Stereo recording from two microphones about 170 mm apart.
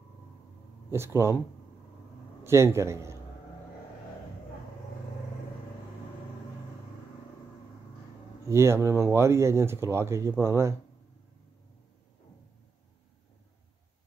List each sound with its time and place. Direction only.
0.8 s speech: 15° right (ahead or behind)
2.4 s speech: 15° right (ahead or behind)
8.5 s speech: 15° right (ahead or behind)